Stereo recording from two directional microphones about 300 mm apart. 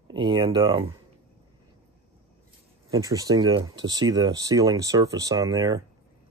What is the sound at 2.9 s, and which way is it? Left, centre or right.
Speech, centre.